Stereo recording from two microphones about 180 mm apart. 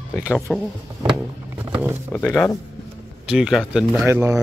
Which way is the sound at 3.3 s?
5° right (ahead or behind).